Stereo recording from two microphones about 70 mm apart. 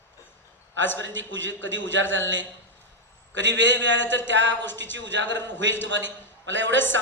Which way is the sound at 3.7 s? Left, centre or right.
Left.